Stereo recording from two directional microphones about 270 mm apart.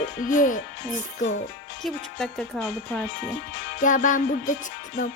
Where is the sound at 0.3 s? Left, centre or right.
Left.